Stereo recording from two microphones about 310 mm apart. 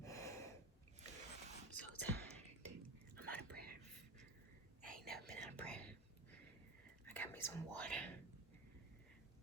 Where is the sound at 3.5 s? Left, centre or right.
Right.